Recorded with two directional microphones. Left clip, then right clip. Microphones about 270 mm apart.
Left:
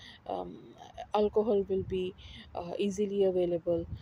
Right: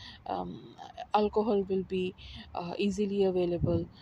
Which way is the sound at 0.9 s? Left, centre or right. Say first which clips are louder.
Right 1 dB; right.